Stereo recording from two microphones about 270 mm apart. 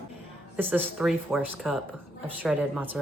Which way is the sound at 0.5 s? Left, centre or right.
Centre.